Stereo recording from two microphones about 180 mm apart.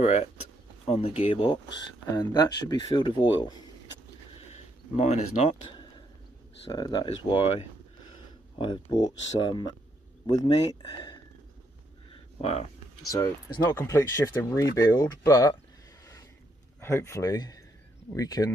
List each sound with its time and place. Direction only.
0.0 s speech: 35° left (ahead or behind)
4.4 s a sound: 35° left (ahead or behind)
6.6 s speech: 25° left (ahead or behind)
12.1 s a sound: 35° left (ahead or behind)
13.6 s speech: 15° left (ahead or behind)
16.8 s speech: 15° left (ahead or behind)